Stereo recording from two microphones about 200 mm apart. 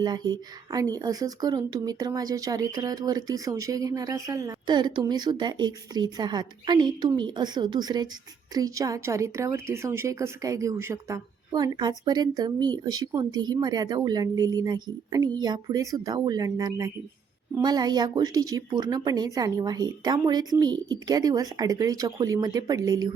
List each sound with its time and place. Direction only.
0.0 s speech: 20° right (ahead or behind)